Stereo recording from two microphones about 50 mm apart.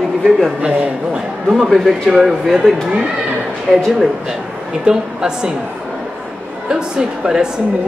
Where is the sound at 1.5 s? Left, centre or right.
Centre.